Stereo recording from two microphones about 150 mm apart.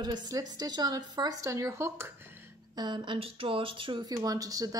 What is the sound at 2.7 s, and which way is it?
Speech, 30° right (ahead or behind).